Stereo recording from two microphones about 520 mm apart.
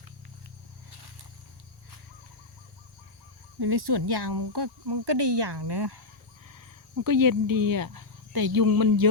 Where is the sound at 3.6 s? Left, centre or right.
Right.